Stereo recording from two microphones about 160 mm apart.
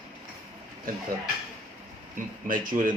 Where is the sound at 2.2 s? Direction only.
60° right (ahead or behind).